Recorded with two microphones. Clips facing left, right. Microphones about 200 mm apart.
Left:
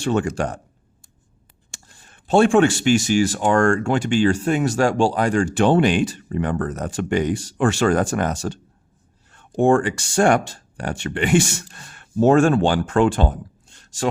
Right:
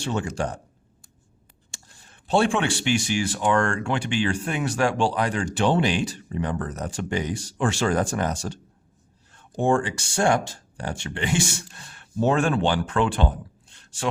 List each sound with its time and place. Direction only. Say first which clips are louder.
0.0 s speech: left 6 dB; 60° left (ahead or behind)
2.2 s speech: left 7 dB; 50° left (ahead or behind)
9.6 s speech: left 6 dB; 60° left (ahead or behind); by 14.1 s 45° left (ahead or behind)